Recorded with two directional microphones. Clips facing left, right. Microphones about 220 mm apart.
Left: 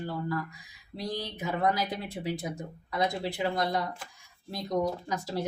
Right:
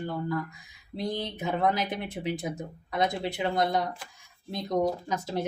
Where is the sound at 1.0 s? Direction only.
20° right (ahead or behind).